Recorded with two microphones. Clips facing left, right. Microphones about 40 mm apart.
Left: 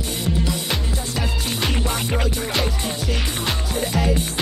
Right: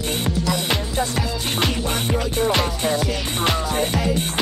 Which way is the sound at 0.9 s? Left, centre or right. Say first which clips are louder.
Right 3 dB; right.